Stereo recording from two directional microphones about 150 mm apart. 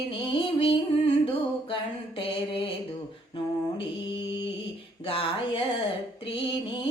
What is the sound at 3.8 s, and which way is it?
Music, 35° left (ahead or behind).